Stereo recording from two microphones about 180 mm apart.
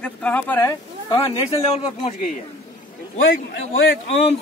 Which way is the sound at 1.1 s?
30° left (ahead or behind).